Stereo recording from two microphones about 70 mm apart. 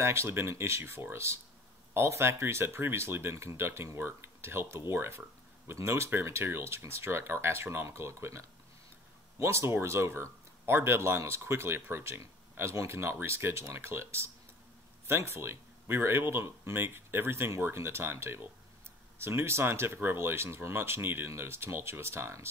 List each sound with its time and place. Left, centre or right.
0.0 s speech: right